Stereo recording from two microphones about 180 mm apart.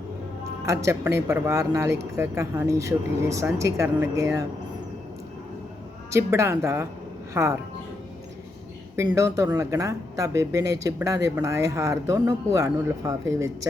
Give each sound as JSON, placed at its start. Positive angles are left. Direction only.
{"t": 0.6, "sound": "speech", "side_deg": -15}
{"t": 6.1, "sound": "speech", "side_deg": -15}
{"t": 9.0, "sound": "speech", "side_deg": -15}